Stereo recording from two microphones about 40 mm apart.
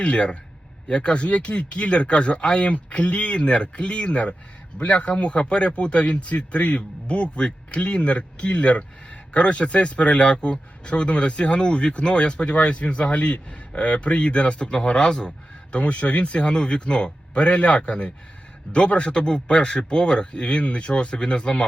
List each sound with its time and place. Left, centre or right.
0.0 s speech: left
15.7 s a man's voice: left